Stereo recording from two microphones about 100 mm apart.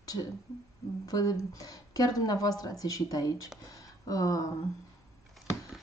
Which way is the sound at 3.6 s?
35° left (ahead or behind).